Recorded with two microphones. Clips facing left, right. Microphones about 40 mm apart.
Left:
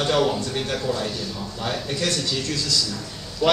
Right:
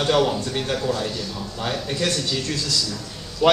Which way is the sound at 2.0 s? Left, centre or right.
Right.